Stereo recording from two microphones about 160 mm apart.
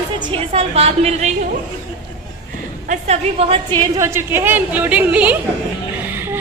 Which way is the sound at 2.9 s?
45° right (ahead or behind).